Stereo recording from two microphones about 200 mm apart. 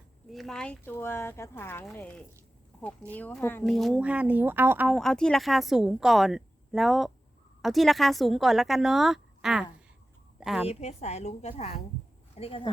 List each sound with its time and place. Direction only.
0.3 s a woman's voice: centre (ahead or behind)
10.7 s a woman's voice: 35° left (ahead or behind)